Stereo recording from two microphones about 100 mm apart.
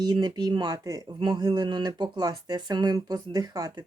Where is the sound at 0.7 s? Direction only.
35° right (ahead or behind).